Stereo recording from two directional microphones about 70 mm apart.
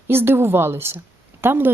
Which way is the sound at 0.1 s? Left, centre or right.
Right.